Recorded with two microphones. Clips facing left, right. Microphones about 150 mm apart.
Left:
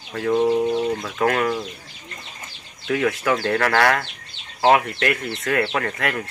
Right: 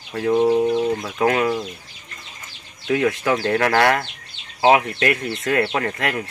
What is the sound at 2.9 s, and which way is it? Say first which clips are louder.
Speech: right 1 dB; 15° right (ahead or behind).